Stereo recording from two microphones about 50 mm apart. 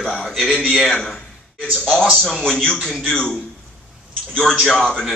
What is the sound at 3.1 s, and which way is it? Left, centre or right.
Speech, left.